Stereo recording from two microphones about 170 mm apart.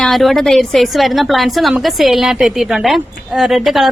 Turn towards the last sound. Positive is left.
turn(degrees=0)  # may be behind; listen again after turning